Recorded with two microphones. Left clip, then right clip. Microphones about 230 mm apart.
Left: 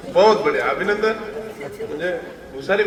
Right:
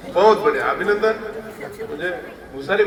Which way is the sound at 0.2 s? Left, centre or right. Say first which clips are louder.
Even; left.